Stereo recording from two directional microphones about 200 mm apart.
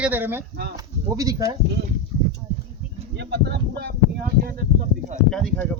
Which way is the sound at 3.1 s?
55° right (ahead or behind).